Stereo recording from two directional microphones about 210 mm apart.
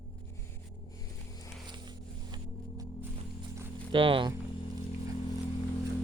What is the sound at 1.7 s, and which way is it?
Music, 20° right (ahead or behind).